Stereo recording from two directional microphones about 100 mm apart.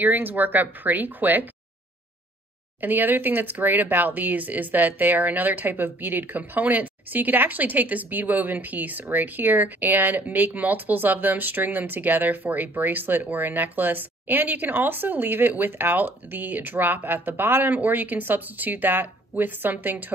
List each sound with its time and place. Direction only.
0.0 s speech: 20° right (ahead or behind)
2.8 s speech: 20° right (ahead or behind)